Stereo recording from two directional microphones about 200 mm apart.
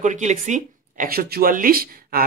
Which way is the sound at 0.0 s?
35° right (ahead or behind).